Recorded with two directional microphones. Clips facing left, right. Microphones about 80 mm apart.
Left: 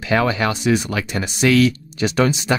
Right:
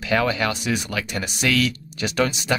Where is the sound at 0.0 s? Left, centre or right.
Left.